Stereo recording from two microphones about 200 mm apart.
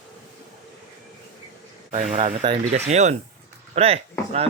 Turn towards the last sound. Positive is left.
turn(degrees=-30)  # may be behind; listen again after turning